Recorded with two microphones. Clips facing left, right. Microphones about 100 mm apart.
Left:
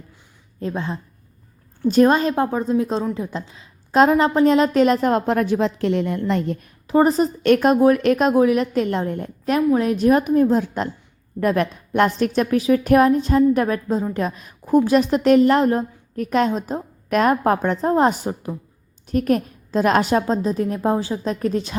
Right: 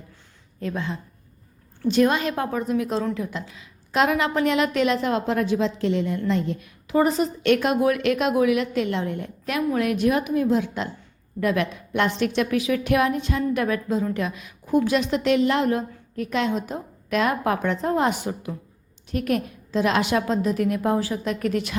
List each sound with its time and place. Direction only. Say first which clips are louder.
0.6 s a woman's voice: left 3 dB; 30° left (ahead or behind); by 6.7 s 55° left (ahead or behind)
6.8 s a woman's voice: left 4 dB; 35° left (ahead or behind)